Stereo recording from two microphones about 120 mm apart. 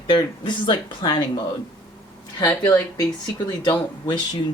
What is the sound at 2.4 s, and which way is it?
Speech, 30° left (ahead or behind).